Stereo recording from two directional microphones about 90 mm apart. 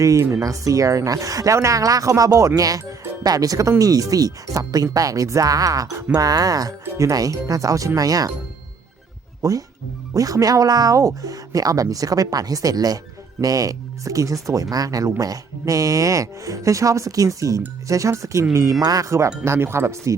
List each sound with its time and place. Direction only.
0.0 s speech: 35° right (ahead or behind)
9.4 s speech: 40° right (ahead or behind)